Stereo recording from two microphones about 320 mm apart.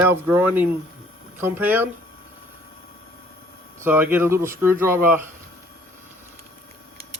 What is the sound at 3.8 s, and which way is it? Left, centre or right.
Speech, centre.